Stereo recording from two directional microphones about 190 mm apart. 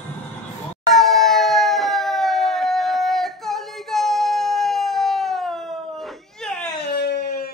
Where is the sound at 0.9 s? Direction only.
Centre (ahead or behind).